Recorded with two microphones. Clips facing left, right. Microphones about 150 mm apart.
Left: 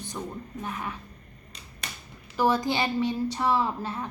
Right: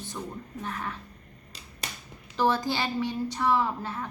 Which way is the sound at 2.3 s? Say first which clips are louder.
Left 2 dB; 15° left (ahead or behind).